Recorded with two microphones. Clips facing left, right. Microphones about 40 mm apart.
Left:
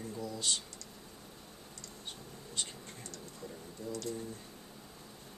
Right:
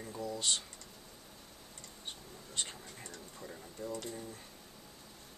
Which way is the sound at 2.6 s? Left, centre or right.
Right.